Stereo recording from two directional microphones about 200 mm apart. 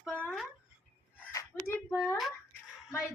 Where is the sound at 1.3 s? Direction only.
15° left (ahead or behind).